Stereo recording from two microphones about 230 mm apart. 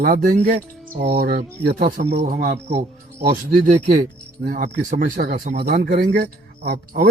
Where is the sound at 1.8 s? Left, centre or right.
Right.